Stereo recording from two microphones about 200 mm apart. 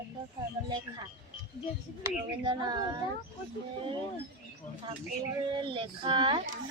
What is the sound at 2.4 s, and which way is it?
Speech, 20° right (ahead or behind).